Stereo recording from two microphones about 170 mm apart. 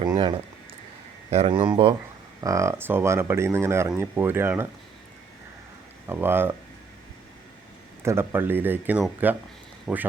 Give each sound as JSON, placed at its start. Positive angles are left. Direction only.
{"t": 0.0, "sound": "a sound", "side_deg": -25}
{"t": 1.3, "sound": "speech", "side_deg": -35}
{"t": 6.1, "sound": "speech", "side_deg": -10}
{"t": 8.0, "sound": "speech", "side_deg": -15}